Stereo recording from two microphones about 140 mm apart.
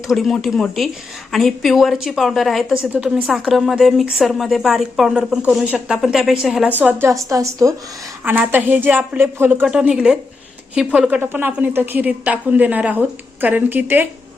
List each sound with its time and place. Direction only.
0.1 s speech: centre (ahead or behind)
6.7 s a woman's voice: 15° right (ahead or behind)